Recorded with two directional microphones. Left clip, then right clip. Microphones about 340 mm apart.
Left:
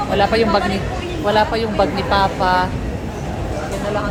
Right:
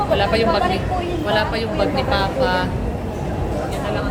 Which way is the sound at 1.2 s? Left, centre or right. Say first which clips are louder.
Left 6 dB; centre.